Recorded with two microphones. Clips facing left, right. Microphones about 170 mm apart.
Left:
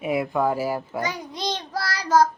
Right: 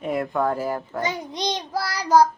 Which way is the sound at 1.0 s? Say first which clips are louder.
Right 2 dB; 20° right (ahead or behind).